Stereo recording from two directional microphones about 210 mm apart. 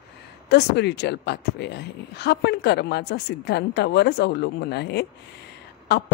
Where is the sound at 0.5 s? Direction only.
55° left (ahead or behind).